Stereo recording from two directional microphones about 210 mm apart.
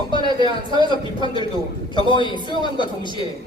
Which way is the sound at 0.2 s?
20° right (ahead or behind).